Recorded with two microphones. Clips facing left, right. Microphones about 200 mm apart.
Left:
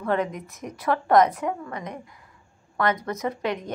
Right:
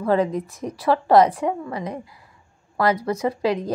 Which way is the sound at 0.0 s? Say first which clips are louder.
Right 5 dB; 35° right (ahead or behind).